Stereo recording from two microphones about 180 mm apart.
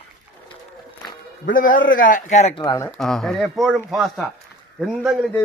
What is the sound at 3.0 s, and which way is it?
Speech, centre (ahead or behind).